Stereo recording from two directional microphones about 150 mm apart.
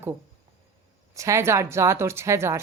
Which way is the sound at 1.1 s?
20° right (ahead or behind).